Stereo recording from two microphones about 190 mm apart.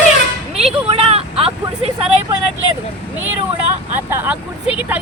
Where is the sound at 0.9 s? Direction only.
30° right (ahead or behind).